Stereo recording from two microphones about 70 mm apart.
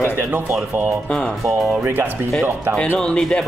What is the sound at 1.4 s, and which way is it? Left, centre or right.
Speech, centre.